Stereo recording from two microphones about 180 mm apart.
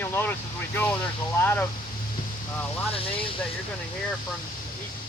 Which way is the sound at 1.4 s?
10° left (ahead or behind).